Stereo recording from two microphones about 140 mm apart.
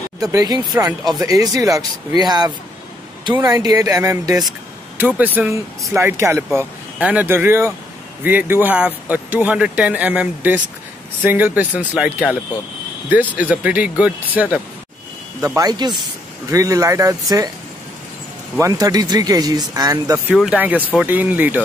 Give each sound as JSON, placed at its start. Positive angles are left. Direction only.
{"t": 0.2, "sound": "speech", "side_deg": -25}
{"t": 3.6, "sound": "speech", "side_deg": -25}
{"t": 4.9, "sound": "speech", "side_deg": -10}
{"t": 15.4, "sound": "speech", "side_deg": -25}
{"t": 18.6, "sound": "speech", "side_deg": -25}
{"t": 20.3, "sound": "speech", "side_deg": -10}